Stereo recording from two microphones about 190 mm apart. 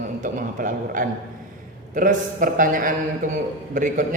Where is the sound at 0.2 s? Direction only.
45° right (ahead or behind).